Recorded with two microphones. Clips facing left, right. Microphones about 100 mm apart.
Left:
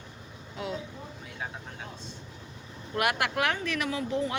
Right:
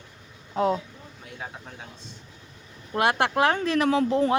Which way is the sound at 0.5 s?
45° right (ahead or behind).